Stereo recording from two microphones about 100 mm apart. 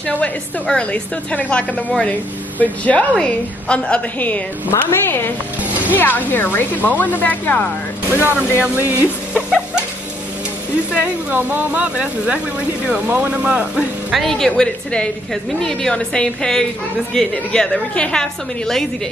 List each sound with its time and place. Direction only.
0.7 s a woman's voice: 10° left (ahead or behind)
5.7 s music: 15° right (ahead or behind)
5.9 s a woman's voice: 20° left (ahead or behind)
8.6 s speech: 20° right (ahead or behind)
10.9 s speech: 15° right (ahead or behind)
14.2 s a woman's voice: 5° left (ahead or behind)